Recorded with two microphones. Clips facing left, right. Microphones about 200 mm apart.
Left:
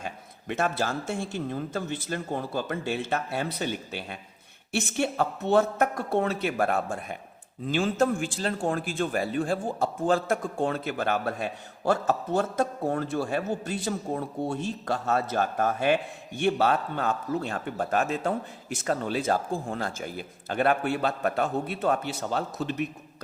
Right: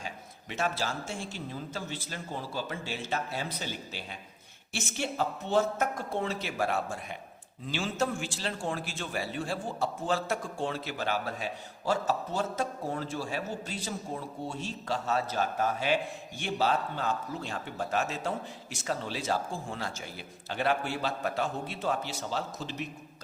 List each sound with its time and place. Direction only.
0.0 s a man's voice: 55° left (ahead or behind)